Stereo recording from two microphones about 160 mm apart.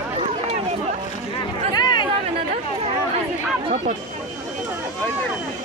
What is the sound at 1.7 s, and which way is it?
Chatter, 25° left (ahead or behind).